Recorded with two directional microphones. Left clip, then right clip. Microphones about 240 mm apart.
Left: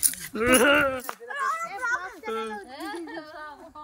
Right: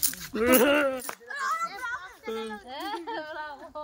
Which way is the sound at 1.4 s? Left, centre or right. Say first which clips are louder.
Left 2 dB; left.